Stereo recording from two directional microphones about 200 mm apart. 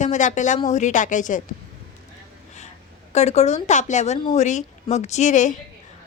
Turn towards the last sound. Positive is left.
turn(degrees=40)  # may be behind; listen again after turning